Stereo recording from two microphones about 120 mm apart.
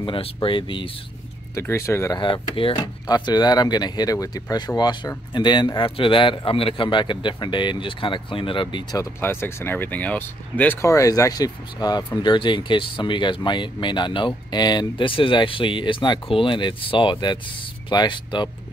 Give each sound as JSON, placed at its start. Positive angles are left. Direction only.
{"t": 0.0, "sound": "speech", "side_deg": 45}
{"t": 1.5, "sound": "speech", "side_deg": 25}
{"t": 2.1, "sound": "speech", "side_deg": 40}
{"t": 2.8, "sound": "speech", "side_deg": 35}
{"t": 9.2, "sound": "speech", "side_deg": 20}